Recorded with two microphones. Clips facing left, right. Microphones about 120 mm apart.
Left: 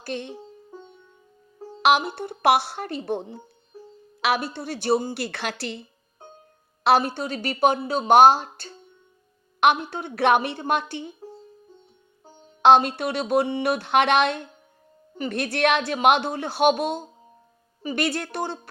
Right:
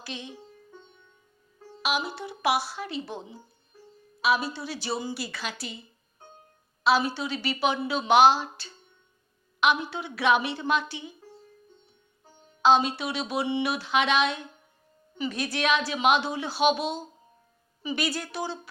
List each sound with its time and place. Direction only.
0.0 s speech: 55° left (ahead or behind)
0.7 s music: 35° left (ahead or behind)
1.8 s speech: 60° left (ahead or behind)
6.8 s a woman's voice: 55° left (ahead or behind)
12.6 s a woman's voice: 55° left (ahead or behind)